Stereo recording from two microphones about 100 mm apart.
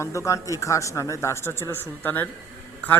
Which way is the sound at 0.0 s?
30° left (ahead or behind).